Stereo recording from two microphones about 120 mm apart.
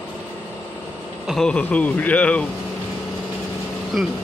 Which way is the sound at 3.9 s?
Centre (ahead or behind).